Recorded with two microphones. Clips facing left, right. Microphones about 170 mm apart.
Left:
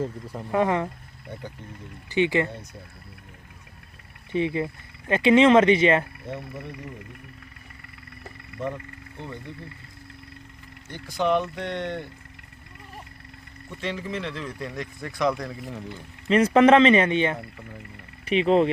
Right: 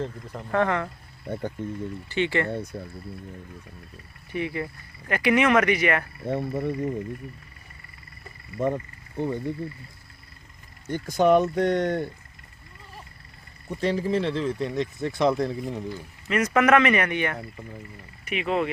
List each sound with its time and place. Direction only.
0.0 s speech: 10° left (ahead or behind)
1.3 s speech: 50° right (ahead or behind)
2.0 s speech: 15° left (ahead or behind)
4.3 s speech: 20° left (ahead or behind)
6.2 s speech: 55° right (ahead or behind)
8.5 s speech: 50° right (ahead or behind)
10.8 s speech: 45° right (ahead or behind)
13.7 s speech: 35° right (ahead or behind)
16.3 s speech: 30° left (ahead or behind)